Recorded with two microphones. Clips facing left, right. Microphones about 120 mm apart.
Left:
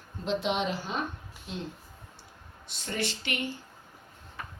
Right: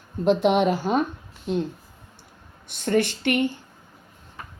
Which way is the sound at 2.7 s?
55° right (ahead or behind).